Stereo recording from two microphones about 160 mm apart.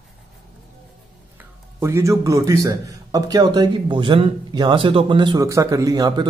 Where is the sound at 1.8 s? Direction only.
15° right (ahead or behind).